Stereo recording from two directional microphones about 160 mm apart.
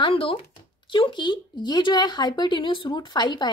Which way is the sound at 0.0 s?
35° left (ahead or behind).